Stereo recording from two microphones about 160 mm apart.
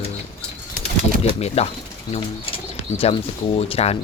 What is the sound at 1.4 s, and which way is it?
Speech, 40° left (ahead or behind).